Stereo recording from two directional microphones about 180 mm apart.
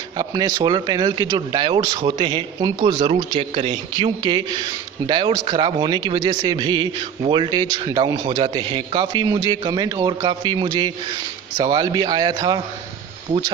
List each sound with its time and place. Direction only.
0.2 s speech: 20° right (ahead or behind)